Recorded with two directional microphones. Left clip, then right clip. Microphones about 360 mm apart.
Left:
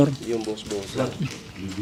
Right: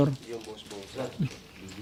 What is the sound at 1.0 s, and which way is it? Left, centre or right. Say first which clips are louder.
Speech: left 8 dB; left.